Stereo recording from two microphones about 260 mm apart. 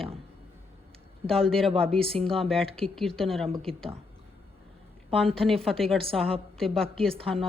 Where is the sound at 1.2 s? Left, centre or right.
Centre.